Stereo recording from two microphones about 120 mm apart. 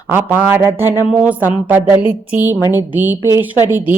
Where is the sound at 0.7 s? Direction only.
20° right (ahead or behind).